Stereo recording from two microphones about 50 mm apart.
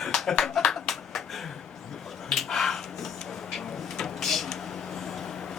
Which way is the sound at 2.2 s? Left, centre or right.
Centre.